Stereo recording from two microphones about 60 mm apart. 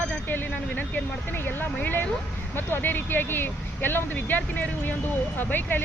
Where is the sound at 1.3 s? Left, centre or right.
Left.